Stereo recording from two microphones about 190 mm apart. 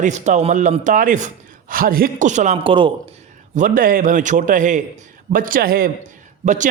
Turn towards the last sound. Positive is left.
turn(degrees=-40)  # may be behind; listen again after turning